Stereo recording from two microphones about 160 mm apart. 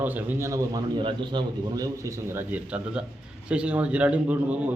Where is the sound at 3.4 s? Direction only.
5° right (ahead or behind).